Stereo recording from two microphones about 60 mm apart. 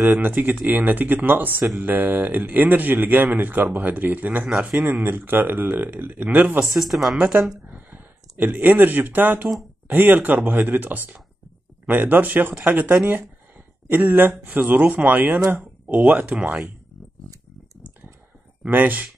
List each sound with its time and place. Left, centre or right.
0.2 s speech: right
4.5 s speech: centre
5.0 s speech: right
6.6 s speech: centre
7.7 s speech: right
14.8 s speech: centre
15.0 s speech: right
18.7 s speech: right